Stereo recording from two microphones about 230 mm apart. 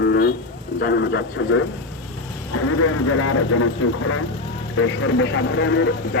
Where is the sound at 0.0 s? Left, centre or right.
Left.